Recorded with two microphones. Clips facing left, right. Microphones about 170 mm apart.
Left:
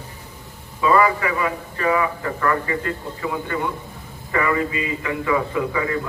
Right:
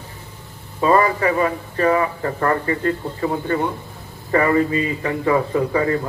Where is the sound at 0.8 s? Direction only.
40° right (ahead or behind).